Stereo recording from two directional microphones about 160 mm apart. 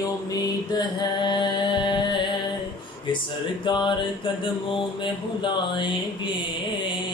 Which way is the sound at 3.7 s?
30° left (ahead or behind).